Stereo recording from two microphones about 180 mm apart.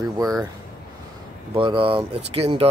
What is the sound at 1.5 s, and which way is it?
Speech, 30° right (ahead or behind).